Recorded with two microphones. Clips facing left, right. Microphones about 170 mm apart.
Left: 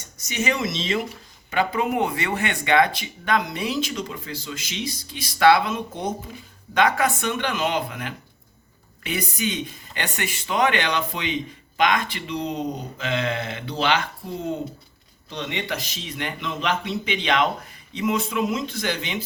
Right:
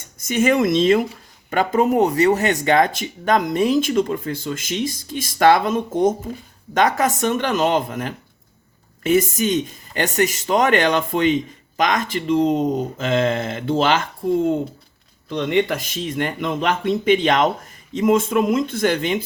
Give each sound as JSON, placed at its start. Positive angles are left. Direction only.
{"t": 0.3, "sound": "speech", "side_deg": -50}
{"t": 15.3, "sound": "speech", "side_deg": -50}